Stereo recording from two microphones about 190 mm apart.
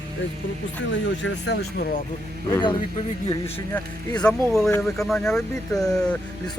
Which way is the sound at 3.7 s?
5° left (ahead or behind).